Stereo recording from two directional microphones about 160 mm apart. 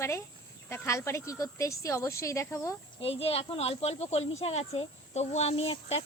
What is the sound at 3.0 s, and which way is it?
Speech, 35° left (ahead or behind).